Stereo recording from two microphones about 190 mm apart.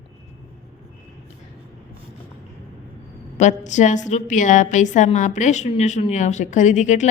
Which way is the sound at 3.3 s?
40° left (ahead or behind).